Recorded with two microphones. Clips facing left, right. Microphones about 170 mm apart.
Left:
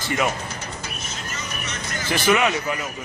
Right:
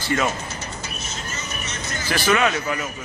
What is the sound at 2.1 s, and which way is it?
Speech, 20° left (ahead or behind).